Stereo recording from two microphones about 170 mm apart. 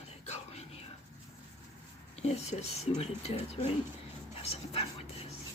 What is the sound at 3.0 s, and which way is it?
Speech, 40° left (ahead or behind).